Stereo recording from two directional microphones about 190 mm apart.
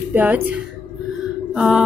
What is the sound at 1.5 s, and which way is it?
Speech, 5° right (ahead or behind).